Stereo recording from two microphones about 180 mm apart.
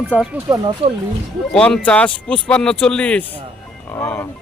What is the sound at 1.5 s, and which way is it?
Speech, 5° left (ahead or behind).